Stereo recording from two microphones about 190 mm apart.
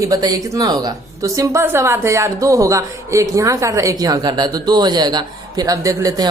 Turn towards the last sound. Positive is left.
turn(degrees=-20)  # may be behind; listen again after turning